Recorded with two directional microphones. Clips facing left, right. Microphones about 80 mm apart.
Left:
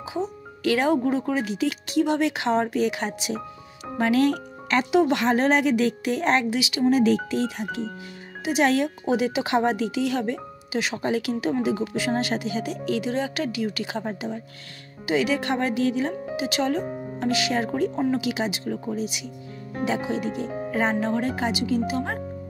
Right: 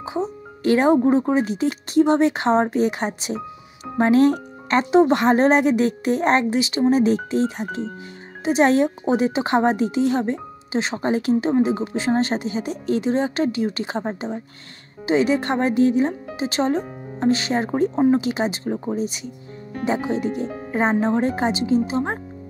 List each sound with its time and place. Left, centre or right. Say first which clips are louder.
0.0 s a woman's voice: right 3 dB; right